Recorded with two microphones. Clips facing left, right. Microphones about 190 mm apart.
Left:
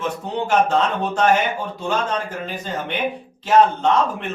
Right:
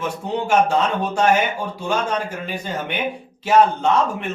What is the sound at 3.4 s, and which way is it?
Speech, 10° right (ahead or behind).